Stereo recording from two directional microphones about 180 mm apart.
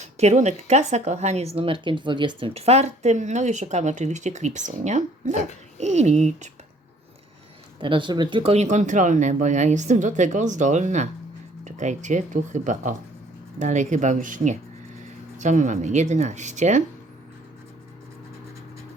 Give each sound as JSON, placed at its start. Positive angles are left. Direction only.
{"t": 0.0, "sound": "a woman's voice", "side_deg": -40}
{"t": 7.8, "sound": "a woman's voice", "side_deg": -25}